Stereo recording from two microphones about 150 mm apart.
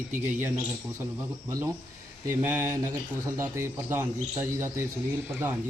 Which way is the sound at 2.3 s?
15° right (ahead or behind).